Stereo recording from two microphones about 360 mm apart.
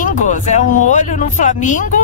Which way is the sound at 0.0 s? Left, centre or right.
Left.